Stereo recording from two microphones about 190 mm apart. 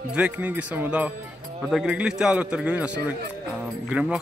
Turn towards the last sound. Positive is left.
turn(degrees=-5)  # may be behind; listen again after turning